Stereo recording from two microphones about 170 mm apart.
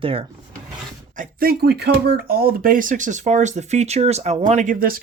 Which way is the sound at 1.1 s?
55° right (ahead or behind).